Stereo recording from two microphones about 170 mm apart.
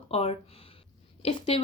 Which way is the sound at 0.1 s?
35° left (ahead or behind).